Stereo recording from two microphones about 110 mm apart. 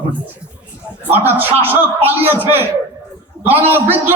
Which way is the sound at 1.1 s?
20° right (ahead or behind).